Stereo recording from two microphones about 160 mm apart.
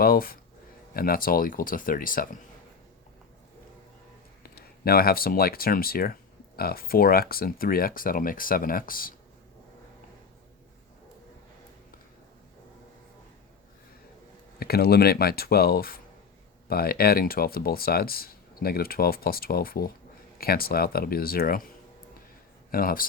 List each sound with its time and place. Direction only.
0.0 s speech: 65° left (ahead or behind)
4.4 s speech: 70° left (ahead or behind)
14.6 s speech: 75° left (ahead or behind)
22.7 s speech: 65° left (ahead or behind)